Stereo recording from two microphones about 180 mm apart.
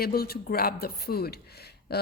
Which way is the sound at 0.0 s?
60° left (ahead or behind).